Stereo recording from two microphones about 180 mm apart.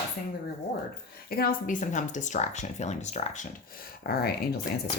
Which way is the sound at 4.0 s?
60° left (ahead or behind).